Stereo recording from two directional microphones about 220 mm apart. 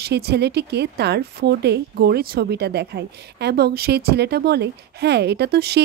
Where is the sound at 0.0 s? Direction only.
50° right (ahead or behind).